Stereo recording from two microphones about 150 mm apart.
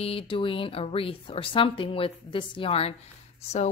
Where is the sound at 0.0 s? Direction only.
40° left (ahead or behind).